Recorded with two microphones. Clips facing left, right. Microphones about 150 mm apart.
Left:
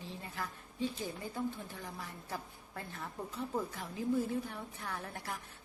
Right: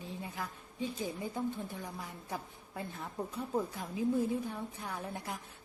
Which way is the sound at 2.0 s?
15° right (ahead or behind).